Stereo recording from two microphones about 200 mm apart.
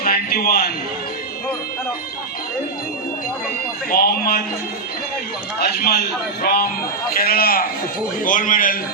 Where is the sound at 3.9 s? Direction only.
45° left (ahead or behind).